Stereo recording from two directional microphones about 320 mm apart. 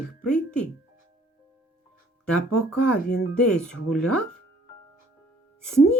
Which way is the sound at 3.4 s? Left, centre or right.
Centre.